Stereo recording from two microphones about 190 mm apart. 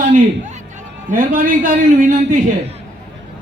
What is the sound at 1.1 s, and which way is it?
A man's voice, 45° right (ahead or behind).